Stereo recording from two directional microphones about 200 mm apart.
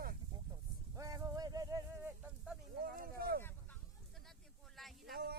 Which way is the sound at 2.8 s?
45° right (ahead or behind).